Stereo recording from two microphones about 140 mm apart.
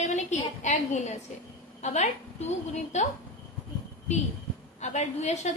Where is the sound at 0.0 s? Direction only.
55° left (ahead or behind).